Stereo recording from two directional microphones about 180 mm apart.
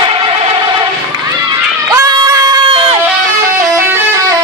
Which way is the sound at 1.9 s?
20° right (ahead or behind).